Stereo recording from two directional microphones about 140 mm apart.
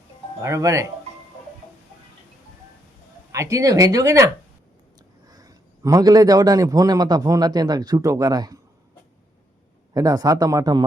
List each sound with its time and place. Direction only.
0.4 s a man's voice: 20° right (ahead or behind)
3.3 s a man's voice: 20° right (ahead or behind)
5.3 s a man's voice: 25° right (ahead or behind)
9.9 s a man's voice: 25° right (ahead or behind)